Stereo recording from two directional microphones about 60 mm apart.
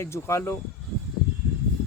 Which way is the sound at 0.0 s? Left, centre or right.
Left.